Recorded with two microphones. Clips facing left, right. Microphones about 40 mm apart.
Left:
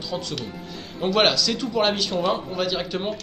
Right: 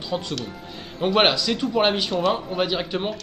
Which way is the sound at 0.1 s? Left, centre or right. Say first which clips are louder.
Right 3 dB; centre.